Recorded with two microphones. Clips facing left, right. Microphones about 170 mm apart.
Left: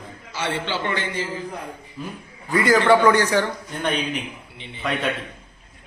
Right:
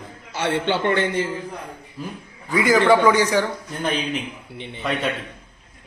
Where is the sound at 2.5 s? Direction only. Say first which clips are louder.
Even; 15° right (ahead or behind).